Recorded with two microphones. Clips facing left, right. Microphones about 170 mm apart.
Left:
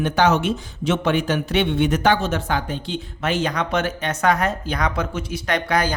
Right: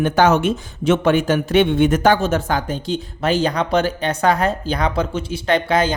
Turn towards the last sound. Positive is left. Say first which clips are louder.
# right 4 dB
turn(degrees=-25)  # may be behind; listen again after turning